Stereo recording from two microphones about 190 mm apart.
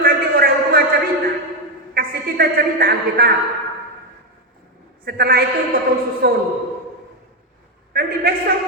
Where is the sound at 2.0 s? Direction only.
50° right (ahead or behind).